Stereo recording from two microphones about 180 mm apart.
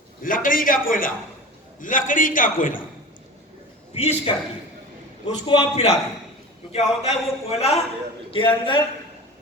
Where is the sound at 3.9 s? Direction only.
35° left (ahead or behind).